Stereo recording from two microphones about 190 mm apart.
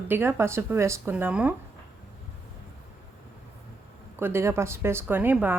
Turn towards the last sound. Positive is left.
turn(degrees=-10)  # may be behind; listen again after turning